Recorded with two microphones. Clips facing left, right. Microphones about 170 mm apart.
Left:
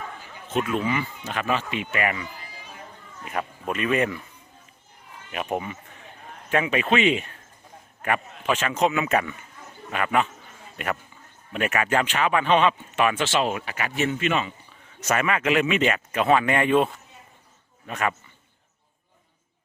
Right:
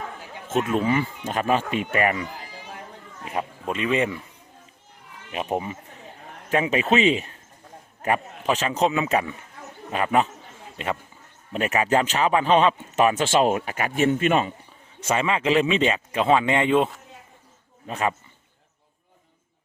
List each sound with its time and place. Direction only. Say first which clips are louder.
0.8 s speech: right 4 dB; 40° right (ahead or behind)
3.3 s speech: right 1 dB; 25° right (ahead or behind)
5.3 s a man's voice: right 2 dB; 30° right (ahead or behind); by 14.5 s 45° right (ahead or behind)
15.0 s speech: right 1 dB; 25° right (ahead or behind)
16.2 s speech: right 1 dB; 20° right (ahead or behind)
17.8 s a man's voice: right 1 dB; 30° right (ahead or behind)